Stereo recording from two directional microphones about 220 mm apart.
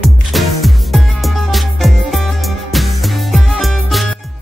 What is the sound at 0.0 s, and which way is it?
Music, centre (ahead or behind).